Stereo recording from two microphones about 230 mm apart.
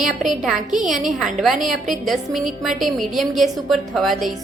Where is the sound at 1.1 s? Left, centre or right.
Centre.